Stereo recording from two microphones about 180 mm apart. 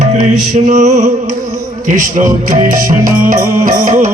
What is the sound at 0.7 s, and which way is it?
Music, 40° right (ahead or behind).